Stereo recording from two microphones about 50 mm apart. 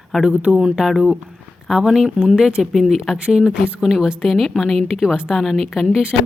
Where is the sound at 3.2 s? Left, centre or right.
Centre.